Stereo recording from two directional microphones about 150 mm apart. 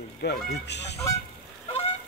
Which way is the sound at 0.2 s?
90° left.